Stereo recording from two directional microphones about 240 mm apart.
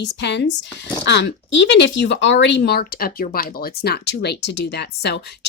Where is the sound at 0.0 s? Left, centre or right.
Left.